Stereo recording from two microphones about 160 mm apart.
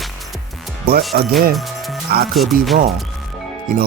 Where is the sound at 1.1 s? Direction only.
70° right (ahead or behind).